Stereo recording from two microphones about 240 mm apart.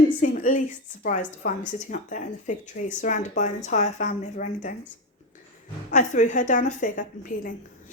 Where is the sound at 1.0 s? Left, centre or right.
Left.